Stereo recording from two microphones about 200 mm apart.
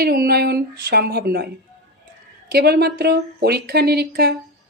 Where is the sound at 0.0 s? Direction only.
50° right (ahead or behind).